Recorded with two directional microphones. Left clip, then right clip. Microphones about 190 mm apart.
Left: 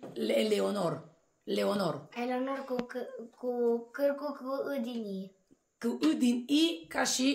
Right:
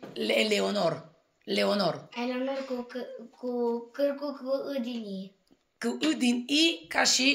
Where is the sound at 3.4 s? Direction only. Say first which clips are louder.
Even; 20° left (ahead or behind).